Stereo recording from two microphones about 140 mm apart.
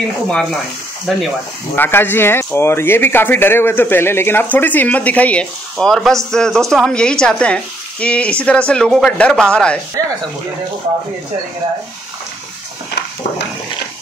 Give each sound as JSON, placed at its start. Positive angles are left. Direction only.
{"t": 0.3, "sound": "a man's voice", "side_deg": 0}
{"t": 1.8, "sound": "a man's voice", "side_deg": 15}